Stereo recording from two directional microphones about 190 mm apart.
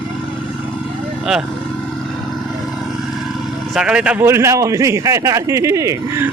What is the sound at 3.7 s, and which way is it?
A man's voice, 5° right (ahead or behind).